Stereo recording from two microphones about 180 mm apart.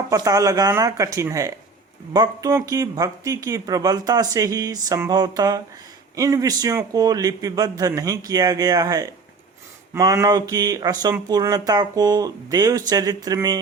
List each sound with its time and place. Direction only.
0.1 s speech: 20° right (ahead or behind)